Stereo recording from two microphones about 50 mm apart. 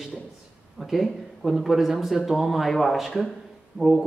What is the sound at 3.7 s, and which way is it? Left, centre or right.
Speech, right.